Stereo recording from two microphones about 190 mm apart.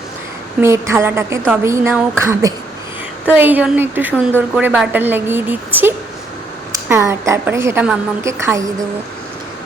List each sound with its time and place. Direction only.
0.6 s a woman's voice: 15° right (ahead or behind)